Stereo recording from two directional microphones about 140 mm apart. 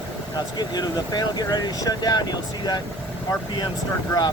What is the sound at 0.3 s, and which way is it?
Speech, 30° left (ahead or behind).